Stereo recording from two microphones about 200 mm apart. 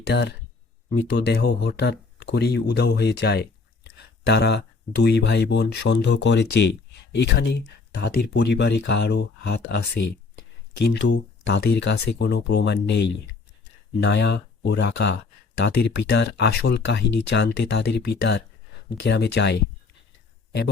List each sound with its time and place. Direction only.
0.1 s speech: 60° left (ahead or behind)
14.0 s speech: 60° left (ahead or behind)